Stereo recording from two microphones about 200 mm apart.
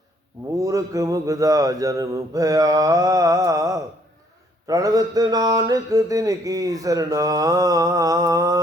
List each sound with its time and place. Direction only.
0.5 s mantra: 15° right (ahead or behind)